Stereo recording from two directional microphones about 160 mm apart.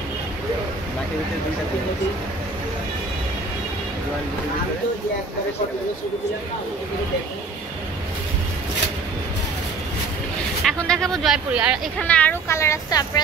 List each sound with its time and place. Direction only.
10.6 s speech: centre (ahead or behind)
12.0 s speech: 10° left (ahead or behind)